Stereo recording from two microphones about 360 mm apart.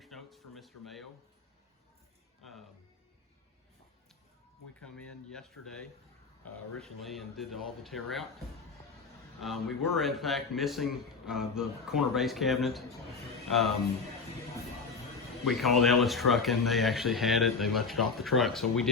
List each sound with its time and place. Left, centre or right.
0.0 s a sound: centre
4.8 s a man's voice: centre
9.4 s a man's voice: centre
15.4 s a man's voice: centre